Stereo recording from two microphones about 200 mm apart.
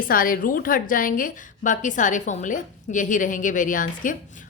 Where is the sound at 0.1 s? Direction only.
45° left (ahead or behind).